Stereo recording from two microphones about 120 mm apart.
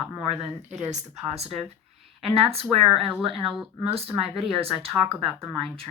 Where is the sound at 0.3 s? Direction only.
65° right (ahead or behind).